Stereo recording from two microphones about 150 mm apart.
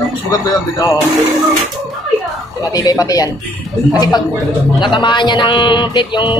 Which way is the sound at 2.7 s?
25° left (ahead or behind).